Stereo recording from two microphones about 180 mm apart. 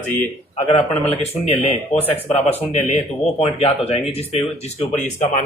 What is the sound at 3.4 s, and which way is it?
Speech, 35° left (ahead or behind).